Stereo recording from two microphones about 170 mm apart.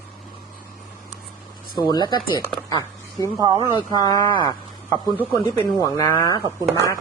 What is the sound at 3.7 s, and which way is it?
Speech, 25° left (ahead or behind).